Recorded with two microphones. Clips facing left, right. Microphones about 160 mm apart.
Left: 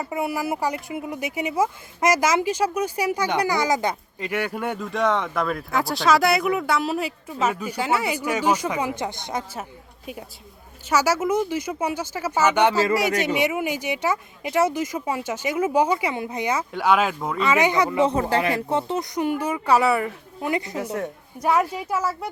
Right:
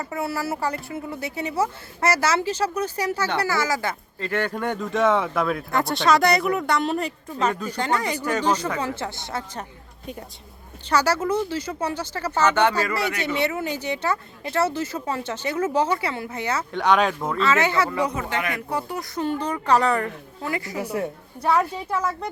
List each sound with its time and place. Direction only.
0.0 s speech: 15° left (ahead or behind)
10.8 s speech: 10° left (ahead or behind)
17.4 s speech: 15° left (ahead or behind)
18.1 s speech: 35° left (ahead or behind); by 20.5 s 10° left (ahead or behind)
20.5 s a woman's voice: 20° left (ahead or behind)
20.9 s a woman's voice: 10° right (ahead or behind)
21.4 s speech: 10° left (ahead or behind)